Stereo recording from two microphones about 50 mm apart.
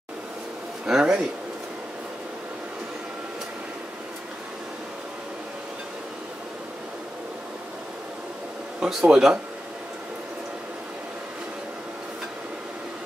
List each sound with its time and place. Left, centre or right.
0.8 s speech: centre
8.7 s speech: centre